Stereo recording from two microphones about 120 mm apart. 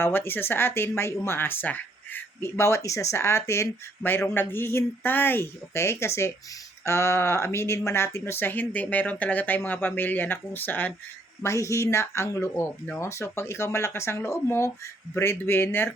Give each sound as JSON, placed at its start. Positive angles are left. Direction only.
{"t": 0.0, "sound": "speech", "side_deg": 20}